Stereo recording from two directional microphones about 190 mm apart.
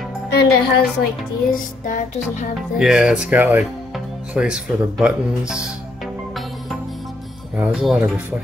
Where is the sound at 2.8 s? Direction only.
5° right (ahead or behind).